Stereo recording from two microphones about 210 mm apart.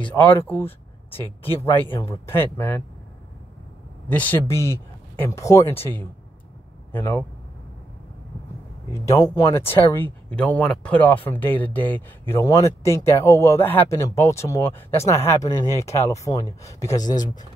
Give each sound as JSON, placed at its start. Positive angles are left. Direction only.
{"t": 0.0, "sound": "speech", "side_deg": 10}
{"t": 4.1, "sound": "speech", "side_deg": 10}
{"t": 6.9, "sound": "speech", "side_deg": 10}
{"t": 8.9, "sound": "speech", "side_deg": 15}